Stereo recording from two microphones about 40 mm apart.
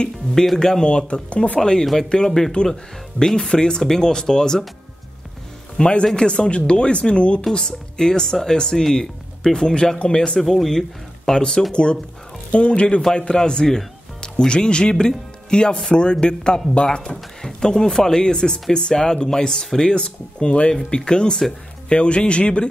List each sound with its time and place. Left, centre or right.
0.3 s speech: centre; by 1.6 s left
1.6 s speech: centre
5.8 s a man's voice: left
10.4 s speech: centre
11.7 s speech: left